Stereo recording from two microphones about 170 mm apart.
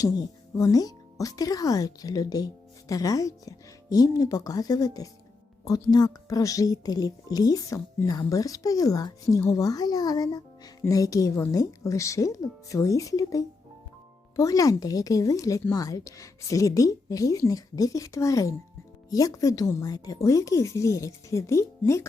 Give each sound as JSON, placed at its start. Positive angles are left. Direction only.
{"t": 0.5, "sound": "speech", "side_deg": 20}